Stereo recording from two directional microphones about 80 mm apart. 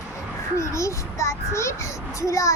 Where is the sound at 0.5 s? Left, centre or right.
Left.